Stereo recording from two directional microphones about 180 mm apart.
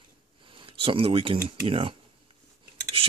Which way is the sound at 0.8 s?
30° right (ahead or behind).